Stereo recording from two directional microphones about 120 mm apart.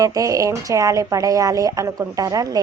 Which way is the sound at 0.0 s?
30° right (ahead or behind).